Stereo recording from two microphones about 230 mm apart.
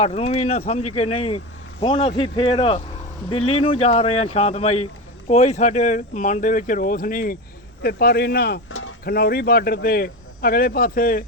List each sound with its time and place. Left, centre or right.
0.0 s speech: left